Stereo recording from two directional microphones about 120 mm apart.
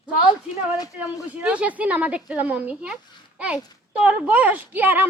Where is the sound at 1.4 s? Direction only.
10° right (ahead or behind).